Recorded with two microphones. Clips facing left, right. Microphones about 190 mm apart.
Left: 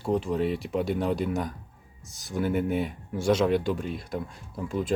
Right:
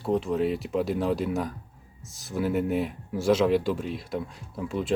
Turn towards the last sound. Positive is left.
turn(degrees=0)  # may be behind; listen again after turning